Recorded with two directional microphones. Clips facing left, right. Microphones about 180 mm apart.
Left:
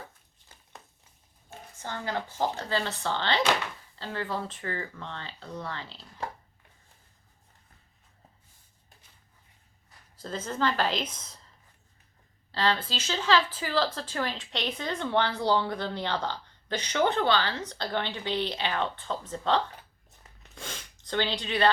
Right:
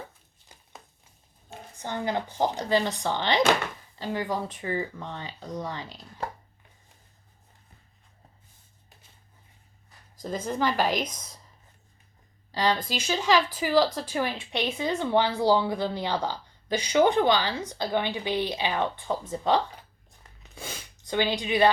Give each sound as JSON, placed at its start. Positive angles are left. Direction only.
{"t": 1.8, "sound": "speech", "side_deg": -20}
{"t": 10.2, "sound": "speech", "side_deg": -15}
{"t": 12.5, "sound": "speech", "side_deg": -15}
{"t": 20.4, "sound": "a sound", "side_deg": -10}